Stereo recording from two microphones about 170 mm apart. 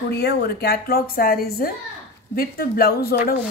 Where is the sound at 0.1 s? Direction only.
75° left (ahead or behind).